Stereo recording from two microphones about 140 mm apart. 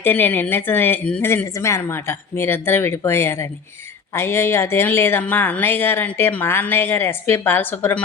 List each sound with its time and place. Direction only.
0.0 s speech: 15° left (ahead or behind)